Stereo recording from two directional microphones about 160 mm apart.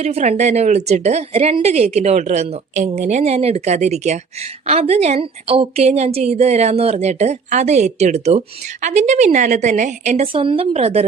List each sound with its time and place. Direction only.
0.0 s a woman's voice: 40° right (ahead or behind)